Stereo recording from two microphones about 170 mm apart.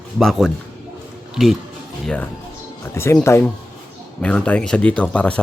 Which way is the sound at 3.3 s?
15° left (ahead or behind).